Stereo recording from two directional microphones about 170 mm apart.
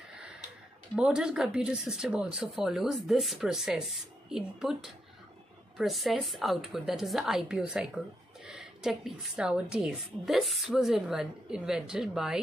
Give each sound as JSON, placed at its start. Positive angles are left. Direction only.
{"t": 0.9, "sound": "speech", "side_deg": -5}